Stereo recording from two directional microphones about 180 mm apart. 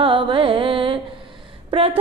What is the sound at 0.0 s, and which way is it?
Music, 30° right (ahead or behind).